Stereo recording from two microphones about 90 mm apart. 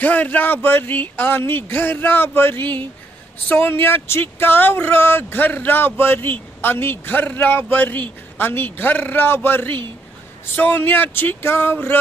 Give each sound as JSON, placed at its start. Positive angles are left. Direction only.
{"t": 0.0, "sound": "speech", "side_deg": 20}